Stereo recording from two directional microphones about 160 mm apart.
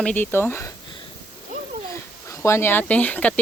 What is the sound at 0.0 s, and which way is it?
Speech, 10° left (ahead or behind).